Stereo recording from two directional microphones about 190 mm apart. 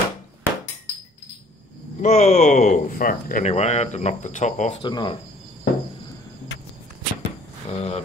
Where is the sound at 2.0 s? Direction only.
35° left (ahead or behind).